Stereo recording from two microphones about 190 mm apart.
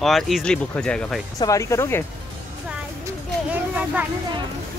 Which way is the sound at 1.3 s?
20° left (ahead or behind).